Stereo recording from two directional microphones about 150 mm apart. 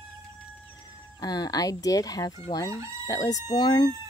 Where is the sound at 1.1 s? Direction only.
25° left (ahead or behind).